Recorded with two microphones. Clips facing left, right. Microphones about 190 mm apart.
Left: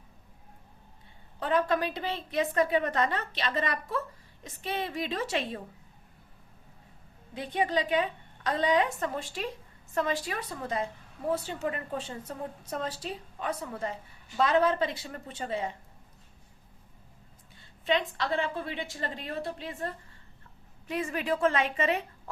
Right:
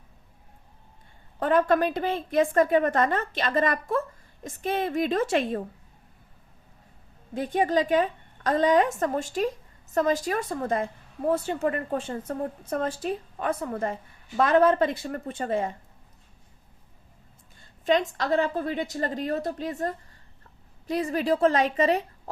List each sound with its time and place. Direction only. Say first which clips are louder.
1.4 s a woman's voice: right 6 dB; 50° right (ahead or behind)
7.3 s a woman's voice: right 5 dB; 45° right (ahead or behind)
17.6 s a woman's voice: right 5 dB; 45° right (ahead or behind)